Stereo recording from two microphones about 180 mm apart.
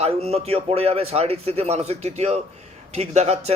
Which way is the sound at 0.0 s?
35° right (ahead or behind).